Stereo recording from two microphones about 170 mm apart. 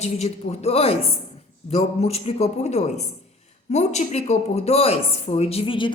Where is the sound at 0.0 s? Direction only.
40° left (ahead or behind).